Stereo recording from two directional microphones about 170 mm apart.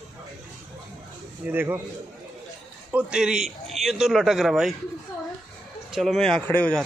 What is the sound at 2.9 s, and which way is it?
A man's voice, 5° right (ahead or behind).